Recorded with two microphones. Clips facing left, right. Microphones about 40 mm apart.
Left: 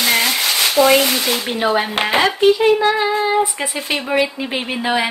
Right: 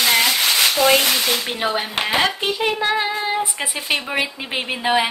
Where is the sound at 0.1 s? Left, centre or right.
Left.